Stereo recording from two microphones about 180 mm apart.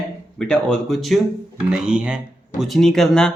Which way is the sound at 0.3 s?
5° left (ahead or behind).